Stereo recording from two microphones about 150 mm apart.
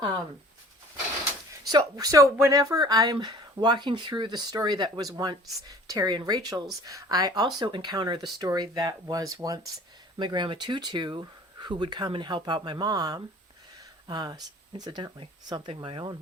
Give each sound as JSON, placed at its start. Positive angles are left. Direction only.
{"t": 1.7, "sound": "speech", "side_deg": -25}